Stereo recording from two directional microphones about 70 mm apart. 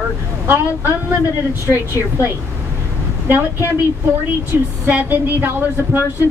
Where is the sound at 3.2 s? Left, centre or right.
Right.